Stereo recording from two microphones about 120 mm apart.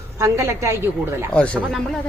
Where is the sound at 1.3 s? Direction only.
10° left (ahead or behind).